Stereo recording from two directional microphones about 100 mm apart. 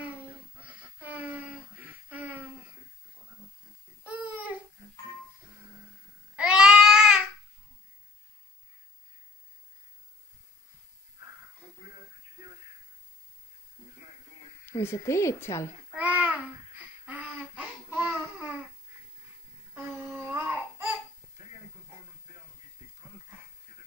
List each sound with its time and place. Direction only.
0.0 s a sound: 15° right (ahead or behind)
4.1 s baby cry: 15° right (ahead or behind)
6.3 s babbling: 10° right (ahead or behind)
14.7 s a woman's voice: 25° left (ahead or behind)
15.9 s babbling: 15° right (ahead or behind)
19.9 s a sound: 5° right (ahead or behind)